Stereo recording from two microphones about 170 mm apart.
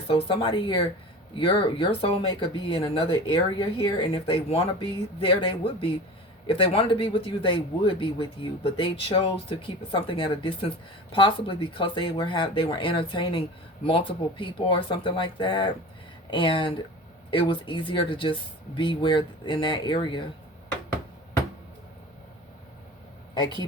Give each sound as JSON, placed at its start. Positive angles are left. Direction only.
{"t": 0.1, "sound": "speech", "side_deg": 30}